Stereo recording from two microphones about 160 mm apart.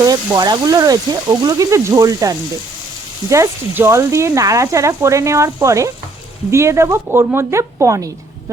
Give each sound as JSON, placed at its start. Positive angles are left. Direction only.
{"t": 0.0, "sound": "a woman's voice", "side_deg": -25}